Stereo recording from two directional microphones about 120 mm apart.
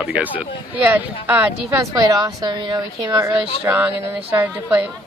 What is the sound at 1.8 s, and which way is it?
Speech, 30° right (ahead or behind).